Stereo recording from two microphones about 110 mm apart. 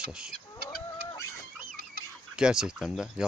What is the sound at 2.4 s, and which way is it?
Chicken, 5° right (ahead or behind).